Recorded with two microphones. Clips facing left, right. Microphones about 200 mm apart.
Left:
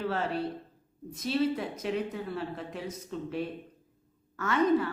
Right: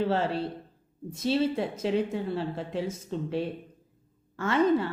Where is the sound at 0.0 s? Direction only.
30° right (ahead or behind).